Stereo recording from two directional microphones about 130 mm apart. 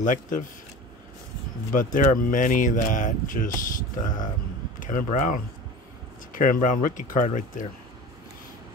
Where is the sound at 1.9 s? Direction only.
90° left.